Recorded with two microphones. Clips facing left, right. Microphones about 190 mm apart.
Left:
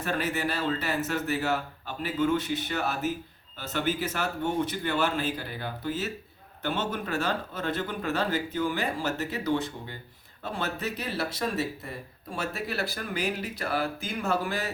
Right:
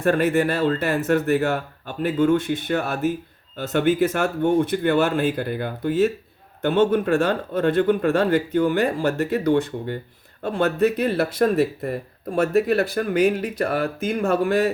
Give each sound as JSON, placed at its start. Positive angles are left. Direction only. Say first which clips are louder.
{"t": 0.0, "sound": "speech", "louder": "right 11 dB", "side_deg": -55}